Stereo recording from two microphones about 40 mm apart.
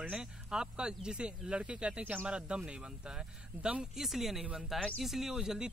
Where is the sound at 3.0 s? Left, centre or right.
Centre.